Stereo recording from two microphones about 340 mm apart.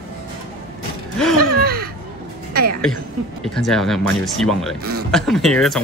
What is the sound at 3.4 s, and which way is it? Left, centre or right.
Speech, centre.